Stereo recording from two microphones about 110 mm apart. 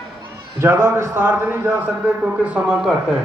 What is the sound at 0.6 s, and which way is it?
A man's voice, 25° right (ahead or behind).